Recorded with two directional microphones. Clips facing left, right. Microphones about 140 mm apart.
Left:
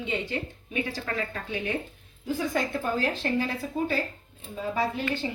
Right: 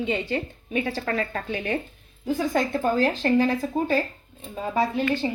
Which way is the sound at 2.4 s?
40° right (ahead or behind).